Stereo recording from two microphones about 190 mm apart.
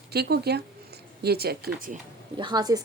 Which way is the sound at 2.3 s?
25° right (ahead or behind).